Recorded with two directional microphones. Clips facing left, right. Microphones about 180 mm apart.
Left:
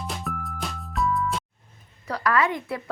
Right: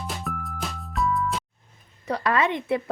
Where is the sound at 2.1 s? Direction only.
25° right (ahead or behind).